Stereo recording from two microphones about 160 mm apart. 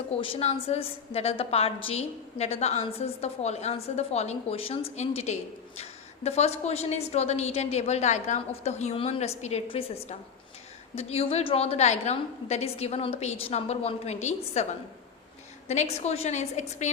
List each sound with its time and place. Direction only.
0.2 s a woman's voice: 35° left (ahead or behind)